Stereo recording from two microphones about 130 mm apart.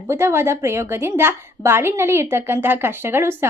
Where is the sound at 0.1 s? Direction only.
20° right (ahead or behind).